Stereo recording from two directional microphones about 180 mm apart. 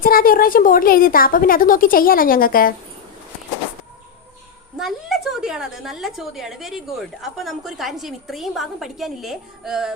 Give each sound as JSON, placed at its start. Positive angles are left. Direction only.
{"t": 0.0, "sound": "speech", "side_deg": 55}
{"t": 4.8, "sound": "a woman's voice", "side_deg": 0}